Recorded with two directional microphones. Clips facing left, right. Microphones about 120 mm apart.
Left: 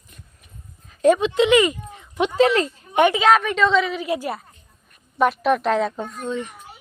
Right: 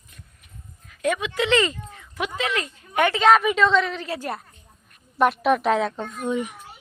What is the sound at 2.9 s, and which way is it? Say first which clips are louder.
Speech: left 4 dB; 20° left (ahead or behind).